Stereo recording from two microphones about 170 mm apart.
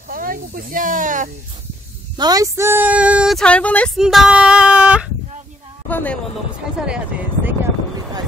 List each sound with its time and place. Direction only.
0.1 s speech: 55° right (ahead or behind)
2.1 s speech: 20° right (ahead or behind); by 5.1 s 5° right (ahead or behind)
5.9 s speech: 10° left (ahead or behind)
6.9 s speech: 10° right (ahead or behind)